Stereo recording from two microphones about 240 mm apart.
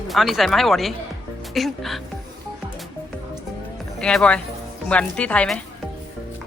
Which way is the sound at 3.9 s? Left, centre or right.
Centre.